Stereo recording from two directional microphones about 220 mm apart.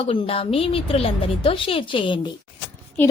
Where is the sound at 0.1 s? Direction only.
25° left (ahead or behind).